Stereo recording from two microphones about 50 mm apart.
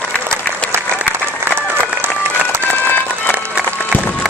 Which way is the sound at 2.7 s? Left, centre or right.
Left.